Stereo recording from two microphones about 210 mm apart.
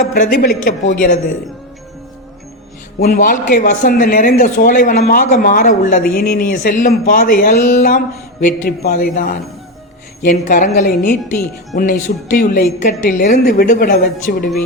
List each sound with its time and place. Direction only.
0.1 s speech: 45° left (ahead or behind)
3.0 s speech: 45° left (ahead or behind)